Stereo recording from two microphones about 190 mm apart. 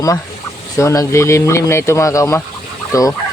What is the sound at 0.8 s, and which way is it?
Speech, 15° left (ahead or behind).